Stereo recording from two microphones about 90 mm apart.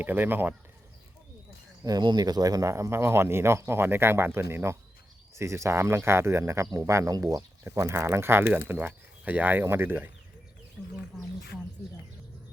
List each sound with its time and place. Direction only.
0.0 s speech: 20° right (ahead or behind)
1.8 s speech: 50° right (ahead or behind)
7.6 s speech: 30° right (ahead or behind)